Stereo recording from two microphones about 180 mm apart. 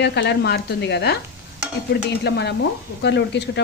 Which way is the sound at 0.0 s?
75° left (ahead or behind).